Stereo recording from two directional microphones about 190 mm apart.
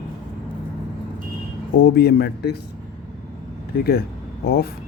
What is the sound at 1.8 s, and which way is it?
Speech, 55° left (ahead or behind).